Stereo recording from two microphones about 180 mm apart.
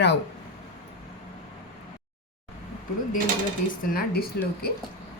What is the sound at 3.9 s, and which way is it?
Speech, 55° left (ahead or behind).